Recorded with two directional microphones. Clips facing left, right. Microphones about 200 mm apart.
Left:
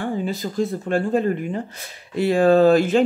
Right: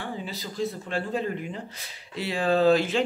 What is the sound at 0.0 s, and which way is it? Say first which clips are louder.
Speech: left 10 dB; 50° left (ahead or behind).